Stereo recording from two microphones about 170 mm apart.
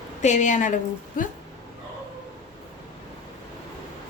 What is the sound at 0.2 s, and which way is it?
A woman's voice, 45° left (ahead or behind).